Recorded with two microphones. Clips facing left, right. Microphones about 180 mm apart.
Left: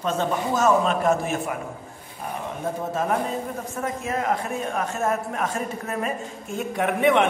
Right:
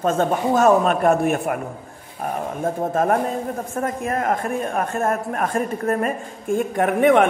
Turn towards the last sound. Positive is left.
turn(degrees=-50)  # may be behind; listen again after turning